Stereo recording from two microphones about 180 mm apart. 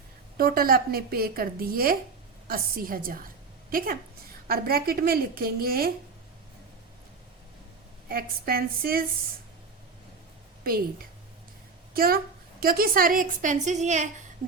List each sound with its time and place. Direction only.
0.3 s a woman's voice: 55° right (ahead or behind)
8.1 s a woman's voice: 55° right (ahead or behind)
10.6 s a woman's voice: 55° right (ahead or behind)
11.9 s a woman's voice: 55° right (ahead or behind)